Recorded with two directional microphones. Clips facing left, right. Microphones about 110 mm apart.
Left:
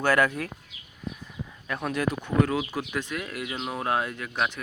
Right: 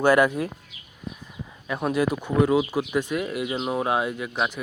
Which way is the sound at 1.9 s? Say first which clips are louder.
Right 4 dB; 10° right (ahead or behind).